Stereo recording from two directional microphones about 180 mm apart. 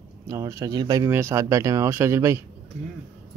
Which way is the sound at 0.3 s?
15° right (ahead or behind).